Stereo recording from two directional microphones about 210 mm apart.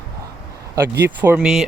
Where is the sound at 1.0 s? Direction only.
10° right (ahead or behind).